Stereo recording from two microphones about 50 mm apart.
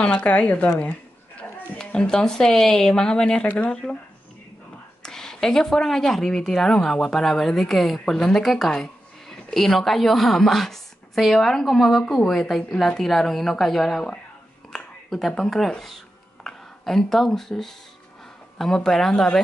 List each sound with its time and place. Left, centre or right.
0.0 s speech: left
0.7 s a sound: left
1.8 s speech: centre
5.0 s speech: centre